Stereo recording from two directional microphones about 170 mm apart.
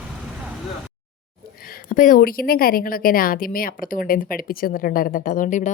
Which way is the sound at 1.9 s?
50° left (ahead or behind).